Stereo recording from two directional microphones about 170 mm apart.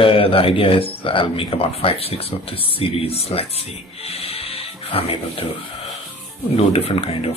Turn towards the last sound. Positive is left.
turn(degrees=35)  # may be behind; listen again after turning